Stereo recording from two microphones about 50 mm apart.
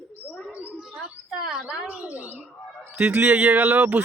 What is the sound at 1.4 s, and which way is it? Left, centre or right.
Speech, centre.